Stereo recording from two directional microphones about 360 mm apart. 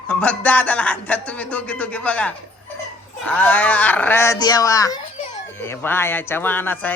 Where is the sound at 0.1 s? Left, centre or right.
Centre.